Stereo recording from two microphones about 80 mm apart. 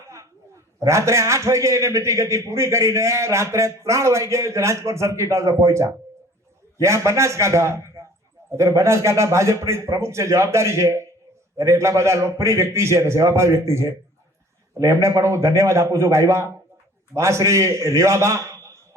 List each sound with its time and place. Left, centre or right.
0.1 s a man's voice: right